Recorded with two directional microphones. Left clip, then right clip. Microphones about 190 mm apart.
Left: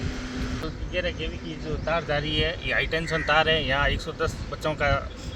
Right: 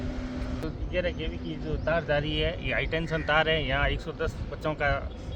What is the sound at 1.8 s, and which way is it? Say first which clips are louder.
Speech: left 1 dB; 10° right (ahead or behind).